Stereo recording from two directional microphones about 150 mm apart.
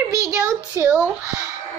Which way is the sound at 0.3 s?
15° right (ahead or behind).